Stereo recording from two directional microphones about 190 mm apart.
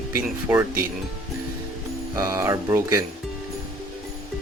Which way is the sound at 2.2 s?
15° right (ahead or behind).